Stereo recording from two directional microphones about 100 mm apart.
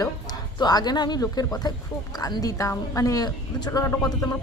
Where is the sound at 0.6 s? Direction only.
45° left (ahead or behind).